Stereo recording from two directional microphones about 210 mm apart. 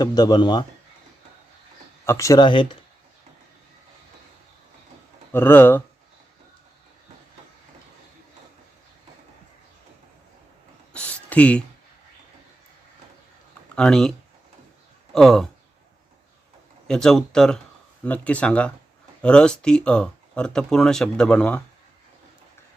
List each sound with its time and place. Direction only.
0.0 s speech: 20° left (ahead or behind)
2.0 s speech: 15° left (ahead or behind)
5.3 s speech: 10° left (ahead or behind)
10.9 s a sound: 5° left (ahead or behind)
13.7 s speech: 5° left (ahead or behind)
16.8 s speech: 5° left (ahead or behind)